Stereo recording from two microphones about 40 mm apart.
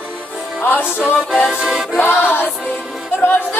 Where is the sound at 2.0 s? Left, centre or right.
Left.